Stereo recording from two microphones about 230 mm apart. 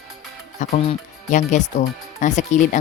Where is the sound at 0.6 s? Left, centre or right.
Left.